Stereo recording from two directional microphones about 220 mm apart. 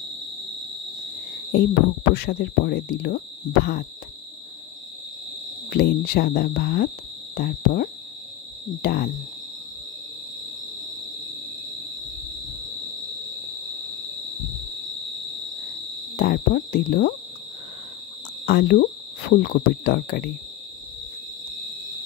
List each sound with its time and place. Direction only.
1.5 s speech: 45° left (ahead or behind)
5.7 s speech: 45° left (ahead or behind)
16.2 s speech: 45° left (ahead or behind)
18.4 s speech: 45° left (ahead or behind)